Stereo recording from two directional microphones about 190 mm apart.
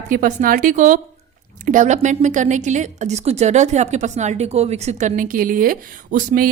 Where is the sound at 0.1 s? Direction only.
40° right (ahead or behind).